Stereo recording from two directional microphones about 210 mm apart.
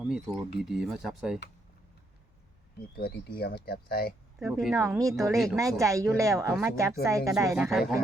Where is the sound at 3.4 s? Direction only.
50° left (ahead or behind).